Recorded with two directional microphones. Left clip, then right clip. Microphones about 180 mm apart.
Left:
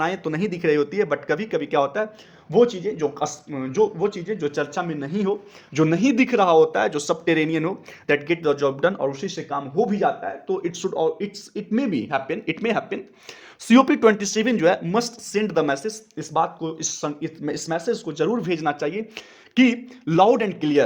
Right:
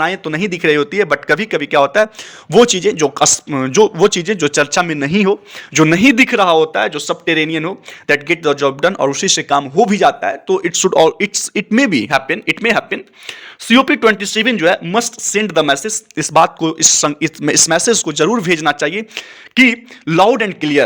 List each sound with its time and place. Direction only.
0.0 s speech: 10° right (ahead or behind)
2.5 s speech: 35° right (ahead or behind)
4.6 s speech: 20° right (ahead or behind)
6.2 s speech: 5° right (ahead or behind)
9.0 s speech: 35° right (ahead or behind)
10.6 s speech: 20° right (ahead or behind)
10.8 s speech: 30° right (ahead or behind); by 13.3 s 10° right (ahead or behind)
13.7 s speech: centre (ahead or behind)
15.3 s speech: 15° right (ahead or behind)
16.1 s speech: 30° right (ahead or behind)